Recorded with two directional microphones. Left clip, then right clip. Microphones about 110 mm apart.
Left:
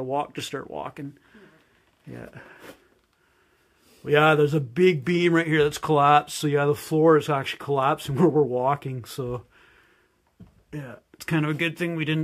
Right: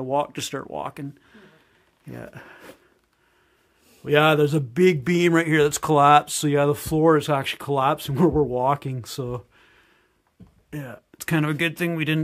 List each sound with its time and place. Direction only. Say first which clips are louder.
0.0 s speech: right 3 dB; 50° right (ahead or behind)
4.0 s speech: right 1 dB; 40° right (ahead or behind)
8.5 s speech: right 2 dB; 50° right (ahead or behind)